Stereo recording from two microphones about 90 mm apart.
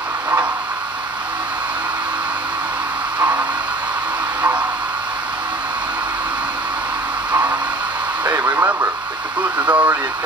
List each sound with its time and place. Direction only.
3.2 s a sound: 15° right (ahead or behind)
8.3 s radio: 20° right (ahead or behind)
9.7 s speech: 15° right (ahead or behind)